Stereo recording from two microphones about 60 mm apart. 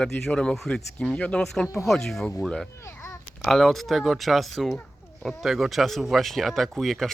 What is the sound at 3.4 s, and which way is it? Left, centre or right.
Speech, centre.